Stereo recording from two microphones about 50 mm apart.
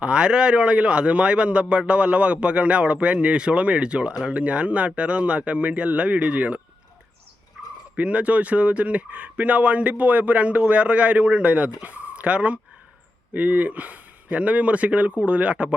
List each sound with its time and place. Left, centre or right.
0.0 s speech: right
7.6 s turkey: right
7.9 s speech: right